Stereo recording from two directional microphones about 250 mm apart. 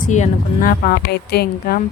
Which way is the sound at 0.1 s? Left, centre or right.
Left.